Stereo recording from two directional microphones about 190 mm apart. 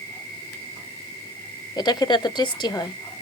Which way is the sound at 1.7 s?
20° left (ahead or behind).